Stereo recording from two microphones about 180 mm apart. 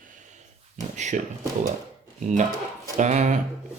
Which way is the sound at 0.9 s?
40° right (ahead or behind).